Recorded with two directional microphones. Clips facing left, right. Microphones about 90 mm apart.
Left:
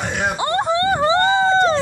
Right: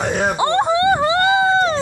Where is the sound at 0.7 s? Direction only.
15° right (ahead or behind).